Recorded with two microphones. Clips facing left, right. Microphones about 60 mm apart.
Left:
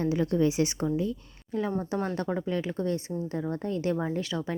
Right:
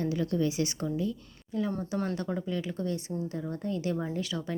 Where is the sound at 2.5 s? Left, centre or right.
Left.